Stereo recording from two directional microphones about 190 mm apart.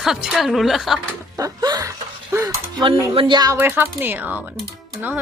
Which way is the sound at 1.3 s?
20° right (ahead or behind).